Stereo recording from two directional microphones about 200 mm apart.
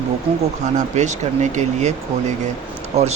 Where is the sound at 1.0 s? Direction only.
35° right (ahead or behind).